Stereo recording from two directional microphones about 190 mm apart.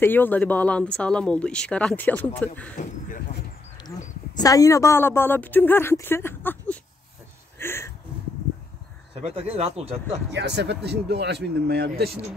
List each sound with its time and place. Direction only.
0.0 s speech: 10° left (ahead or behind)
4.4 s speech: 20° left (ahead or behind)
7.5 s a sound: 10° left (ahead or behind)
9.2 s speech: 30° right (ahead or behind)
10.3 s speech: 65° right (ahead or behind)